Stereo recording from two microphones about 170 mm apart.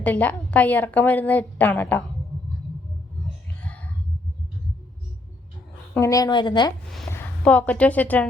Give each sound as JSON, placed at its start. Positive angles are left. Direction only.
{"t": 0.0, "sound": "a woman's voice", "side_deg": 10}
{"t": 6.0, "sound": "speech", "side_deg": 20}
{"t": 7.1, "sound": "a woman's voice", "side_deg": 10}